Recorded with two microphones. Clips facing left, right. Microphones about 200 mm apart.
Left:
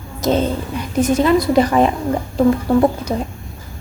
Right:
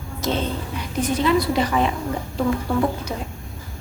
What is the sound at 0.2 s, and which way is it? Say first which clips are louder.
A woman's voice: left 7 dB; 40° left (ahead or behind).